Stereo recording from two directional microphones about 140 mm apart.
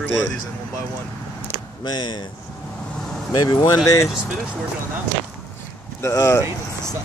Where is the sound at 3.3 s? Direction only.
30° left (ahead or behind).